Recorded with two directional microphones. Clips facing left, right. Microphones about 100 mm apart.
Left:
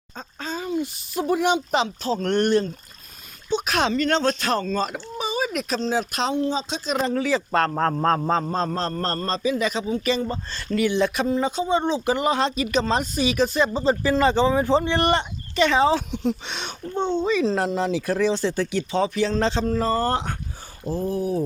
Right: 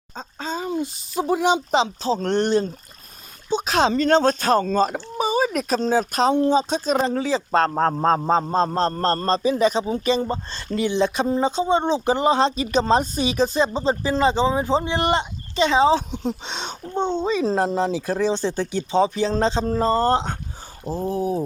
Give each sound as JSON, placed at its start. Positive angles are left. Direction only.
{"t": 0.2, "sound": "speech", "side_deg": -25}
{"t": 7.0, "sound": "speech", "side_deg": -25}